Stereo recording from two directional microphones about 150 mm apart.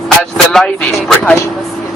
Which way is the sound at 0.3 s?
5° left (ahead or behind).